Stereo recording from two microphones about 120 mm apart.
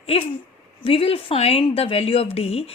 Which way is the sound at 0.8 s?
50° left (ahead or behind).